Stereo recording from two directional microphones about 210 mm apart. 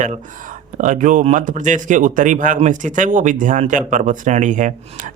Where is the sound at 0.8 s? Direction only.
40° right (ahead or behind).